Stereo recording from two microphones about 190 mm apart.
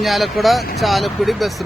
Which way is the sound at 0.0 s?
Centre (ahead or behind).